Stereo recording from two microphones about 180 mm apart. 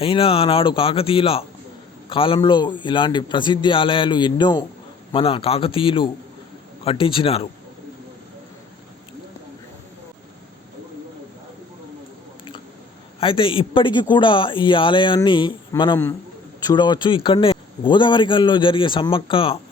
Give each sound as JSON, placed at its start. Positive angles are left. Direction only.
{"t": 0.0, "sound": "a man's voice", "side_deg": 30}
{"t": 13.1, "sound": "a man's voice", "side_deg": 30}
{"t": 16.6, "sound": "a man's voice", "side_deg": 25}